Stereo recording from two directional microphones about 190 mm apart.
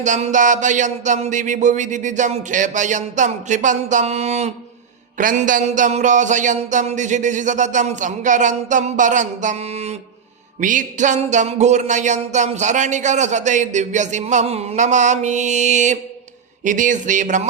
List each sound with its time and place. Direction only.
0.0 s music: 40° right (ahead or behind)